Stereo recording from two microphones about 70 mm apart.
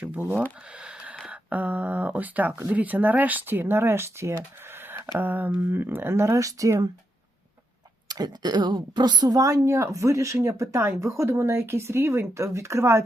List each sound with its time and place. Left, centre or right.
0.8 s speech: centre; by 5.0 s right
5.1 s speech: right
8.0 s speech: right